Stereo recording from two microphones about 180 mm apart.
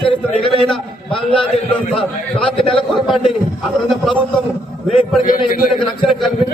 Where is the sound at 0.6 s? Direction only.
Centre (ahead or behind).